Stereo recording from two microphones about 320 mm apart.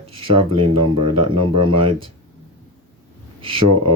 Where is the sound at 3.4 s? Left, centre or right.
Centre.